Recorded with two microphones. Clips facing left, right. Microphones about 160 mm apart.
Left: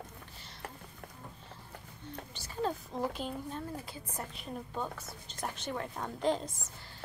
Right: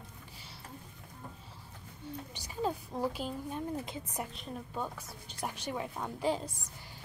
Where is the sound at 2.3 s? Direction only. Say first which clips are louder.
Even; 10° right (ahead or behind).